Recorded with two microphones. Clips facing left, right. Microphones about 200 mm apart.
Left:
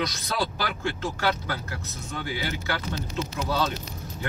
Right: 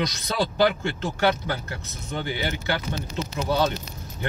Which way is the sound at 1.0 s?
20° right (ahead or behind).